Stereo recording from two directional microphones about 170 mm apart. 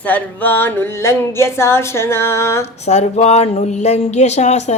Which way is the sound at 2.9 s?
40° left (ahead or behind).